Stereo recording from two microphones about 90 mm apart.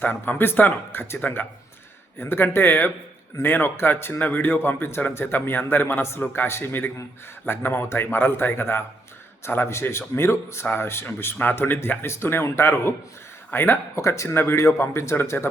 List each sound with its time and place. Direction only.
0.0 s a man's voice: 20° left (ahead or behind)